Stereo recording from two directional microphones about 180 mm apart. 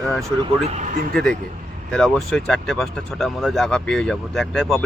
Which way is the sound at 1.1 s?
5° left (ahead or behind).